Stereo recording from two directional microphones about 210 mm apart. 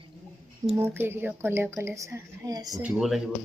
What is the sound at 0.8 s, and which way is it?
A woman's voice, 10° right (ahead or behind).